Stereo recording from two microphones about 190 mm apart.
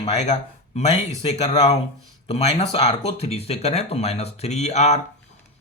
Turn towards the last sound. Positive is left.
turn(degrees=35)  # may be behind; listen again after turning